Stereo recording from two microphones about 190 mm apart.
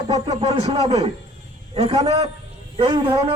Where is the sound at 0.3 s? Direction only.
30° right (ahead or behind).